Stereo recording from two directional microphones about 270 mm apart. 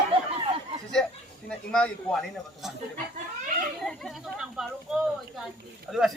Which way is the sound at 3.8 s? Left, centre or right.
Centre.